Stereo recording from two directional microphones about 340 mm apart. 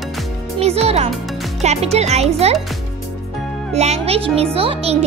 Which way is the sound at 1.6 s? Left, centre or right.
Centre.